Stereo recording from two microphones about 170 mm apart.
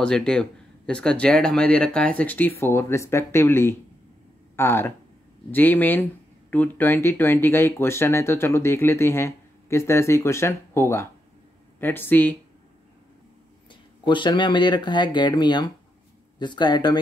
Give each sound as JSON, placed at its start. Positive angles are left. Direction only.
{"t": 0.0, "sound": "speech", "side_deg": 5}
{"t": 13.7, "sound": "speech", "side_deg": 30}